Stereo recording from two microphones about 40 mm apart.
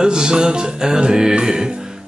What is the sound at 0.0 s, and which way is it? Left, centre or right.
Music, right.